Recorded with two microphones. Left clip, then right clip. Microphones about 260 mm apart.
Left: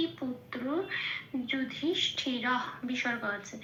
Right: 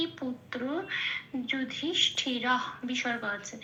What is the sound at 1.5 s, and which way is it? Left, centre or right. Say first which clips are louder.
A woman's voice: even; centre.